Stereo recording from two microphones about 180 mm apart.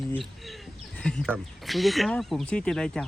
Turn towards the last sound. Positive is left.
turn(degrees=5)  # may be behind; listen again after turning